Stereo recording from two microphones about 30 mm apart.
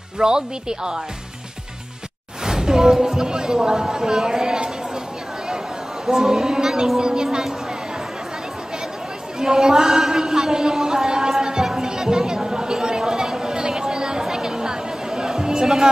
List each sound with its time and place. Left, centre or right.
0.2 s speech: right
2.4 s speech: centre
6.0 s a man's voice: centre
9.4 s a man's voice: centre
11.6 s music: centre
11.9 s chatter: right
14.3 s music: right
15.6 s a man's voice: centre